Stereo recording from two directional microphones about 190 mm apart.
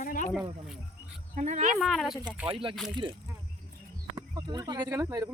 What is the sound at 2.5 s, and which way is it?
Speech, 30° right (ahead or behind).